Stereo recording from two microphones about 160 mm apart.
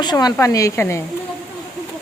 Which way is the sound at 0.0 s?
25° left (ahead or behind).